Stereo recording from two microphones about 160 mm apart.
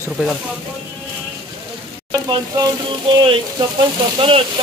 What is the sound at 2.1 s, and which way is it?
Speech, 25° right (ahead or behind).